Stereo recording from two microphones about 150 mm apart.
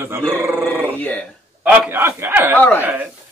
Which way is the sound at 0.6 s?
10° left (ahead or behind).